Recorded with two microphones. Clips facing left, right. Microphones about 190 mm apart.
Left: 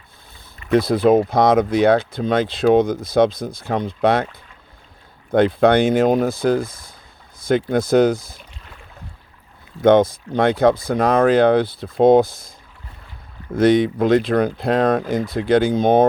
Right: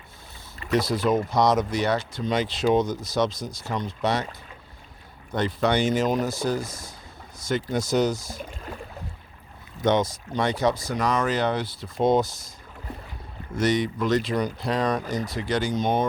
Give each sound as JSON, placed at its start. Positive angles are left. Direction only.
{"t": 0.7, "sound": "speech", "side_deg": 55}
{"t": 5.3, "sound": "speech", "side_deg": 55}
{"t": 8.4, "sound": "boat", "side_deg": -45}
{"t": 9.8, "sound": "speech", "side_deg": 55}
{"t": 13.6, "sound": "speech", "side_deg": 55}